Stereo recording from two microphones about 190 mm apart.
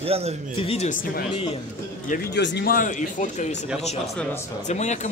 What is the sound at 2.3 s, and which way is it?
Speech, 65° left (ahead or behind).